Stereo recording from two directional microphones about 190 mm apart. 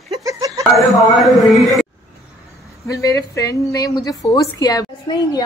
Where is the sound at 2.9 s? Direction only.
15° left (ahead or behind).